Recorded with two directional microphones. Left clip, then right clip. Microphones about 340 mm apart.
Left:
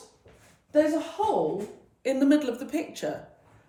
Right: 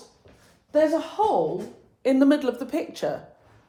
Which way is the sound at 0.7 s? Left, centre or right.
Centre.